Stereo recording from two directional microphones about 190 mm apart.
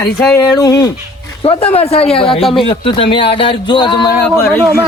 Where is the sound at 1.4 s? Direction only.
35° left (ahead or behind).